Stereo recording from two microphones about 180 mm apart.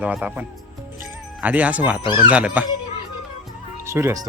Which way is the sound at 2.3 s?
5° right (ahead or behind).